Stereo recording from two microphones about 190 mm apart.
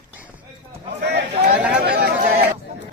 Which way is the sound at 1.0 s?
60° right (ahead or behind).